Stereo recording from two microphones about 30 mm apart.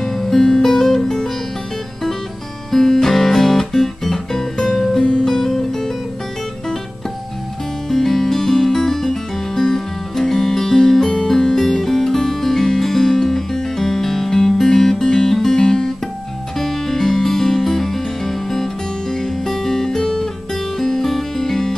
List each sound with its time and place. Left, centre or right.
0.0 s music: centre
2.7 s guitar: centre
5.2 s music: centre
7.9 s music: centre
15.3 s music: centre
15.6 s guitar: centre
16.5 s music: centre